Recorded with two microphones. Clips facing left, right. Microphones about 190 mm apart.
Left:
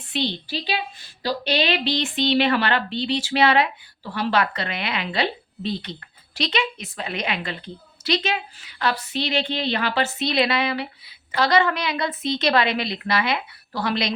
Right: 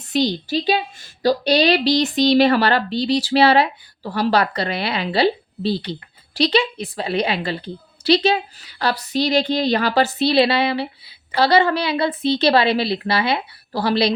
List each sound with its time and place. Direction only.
0.1 s a woman's voice: 40° right (ahead or behind)